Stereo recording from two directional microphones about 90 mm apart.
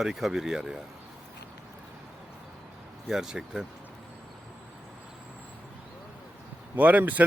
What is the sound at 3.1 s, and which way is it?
Speech, 5° right (ahead or behind).